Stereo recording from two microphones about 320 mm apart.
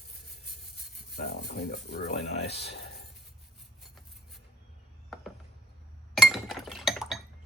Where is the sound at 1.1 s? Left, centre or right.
Left.